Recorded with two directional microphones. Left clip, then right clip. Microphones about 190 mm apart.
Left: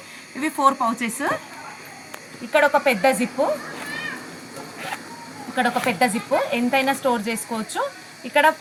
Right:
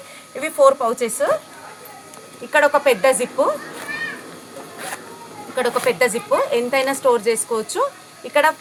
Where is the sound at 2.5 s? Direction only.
45° right (ahead or behind).